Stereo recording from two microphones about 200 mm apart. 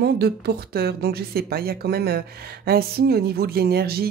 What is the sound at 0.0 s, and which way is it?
A woman's voice, 50° right (ahead or behind).